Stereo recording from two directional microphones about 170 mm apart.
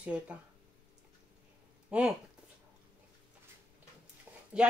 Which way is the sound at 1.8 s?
5° right (ahead or behind).